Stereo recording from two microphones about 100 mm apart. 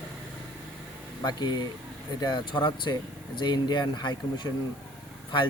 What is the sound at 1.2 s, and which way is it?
Speech, 45° left (ahead or behind).